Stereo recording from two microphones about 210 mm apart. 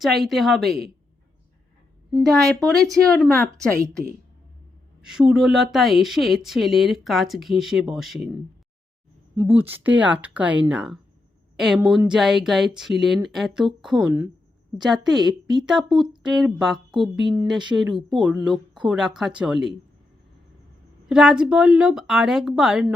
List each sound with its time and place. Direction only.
0.0 s speech: centre (ahead or behind)
2.1 s a woman's voice: centre (ahead or behind)
5.0 s speech: 5° right (ahead or behind)
9.3 s speech: 15° right (ahead or behind)
15.2 s a woman's voice: 20° right (ahead or behind)
15.6 s speech: centre (ahead or behind)
17.0 s a woman's voice: 20° right (ahead or behind)
18.1 s speech: centre (ahead or behind)
21.1 s speech: centre (ahead or behind)